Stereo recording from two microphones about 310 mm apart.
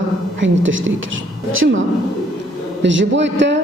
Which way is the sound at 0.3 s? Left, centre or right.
Right.